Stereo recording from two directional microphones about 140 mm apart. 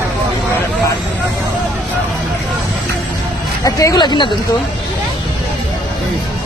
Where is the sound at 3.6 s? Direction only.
25° left (ahead or behind).